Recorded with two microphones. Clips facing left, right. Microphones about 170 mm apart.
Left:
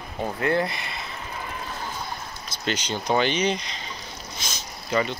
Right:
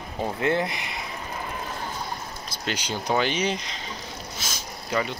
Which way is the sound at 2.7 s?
10° right (ahead or behind).